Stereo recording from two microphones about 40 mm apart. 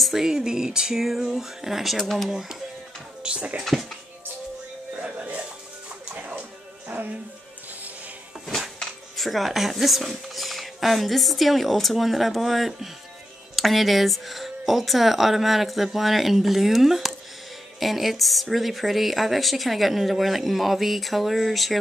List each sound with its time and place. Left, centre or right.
0.0 s speech: centre
2.0 s a woman's voice: centre
3.3 s speech: right
4.9 s music: right
9.1 s a woman's voice: centre